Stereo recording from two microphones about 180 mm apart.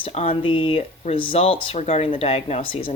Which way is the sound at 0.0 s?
35° left (ahead or behind).